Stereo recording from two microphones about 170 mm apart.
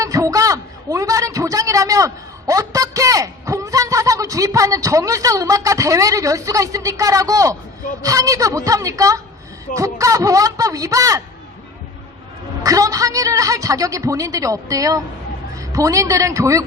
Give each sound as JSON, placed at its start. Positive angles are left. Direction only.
{"t": 0.0, "sound": "a sound", "side_deg": -20}
{"t": 8.0, "sound": "a woman's voice", "side_deg": -20}
{"t": 12.6, "sound": "a woman's voice", "side_deg": -20}